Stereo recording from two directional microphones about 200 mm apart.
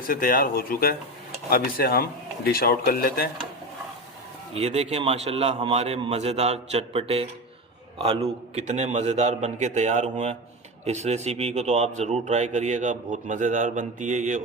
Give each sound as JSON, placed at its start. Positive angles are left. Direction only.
{"t": 0.1, "sound": "speech", "side_deg": 45}
{"t": 4.5, "sound": "speech", "side_deg": -30}